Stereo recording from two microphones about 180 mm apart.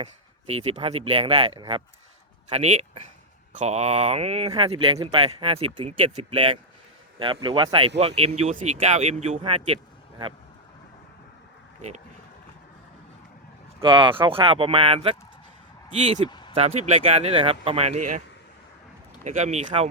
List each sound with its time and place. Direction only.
0.0 s speech: 35° right (ahead or behind)
13.8 s speech: 25° right (ahead or behind)
16.3 s a sound: 25° left (ahead or behind)
16.6 s speech: 35° right (ahead or behind)
19.2 s speech: 40° right (ahead or behind)